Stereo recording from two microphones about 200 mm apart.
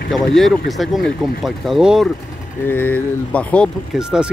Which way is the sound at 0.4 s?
Centre (ahead or behind).